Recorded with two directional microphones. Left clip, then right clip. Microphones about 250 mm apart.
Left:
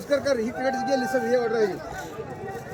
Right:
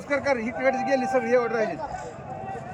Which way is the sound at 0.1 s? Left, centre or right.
Centre.